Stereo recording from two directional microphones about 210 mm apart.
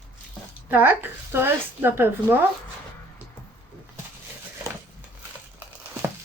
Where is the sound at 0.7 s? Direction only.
10° right (ahead or behind).